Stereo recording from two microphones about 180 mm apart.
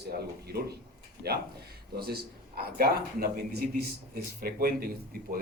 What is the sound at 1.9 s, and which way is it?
A man's voice, 60° right (ahead or behind).